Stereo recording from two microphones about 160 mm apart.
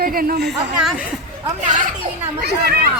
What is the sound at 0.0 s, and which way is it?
Speech, 65° right (ahead or behind).